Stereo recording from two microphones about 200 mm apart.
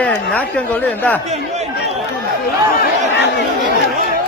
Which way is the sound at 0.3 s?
5° left (ahead or behind).